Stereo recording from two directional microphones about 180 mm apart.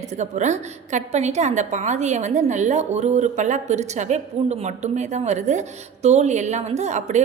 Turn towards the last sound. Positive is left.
turn(degrees=-40)  # may be behind; listen again after turning